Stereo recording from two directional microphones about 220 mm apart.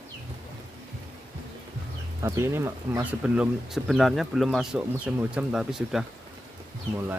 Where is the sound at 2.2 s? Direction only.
10° right (ahead or behind).